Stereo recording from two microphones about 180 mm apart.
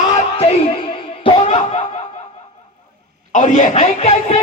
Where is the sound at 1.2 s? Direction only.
35° left (ahead or behind).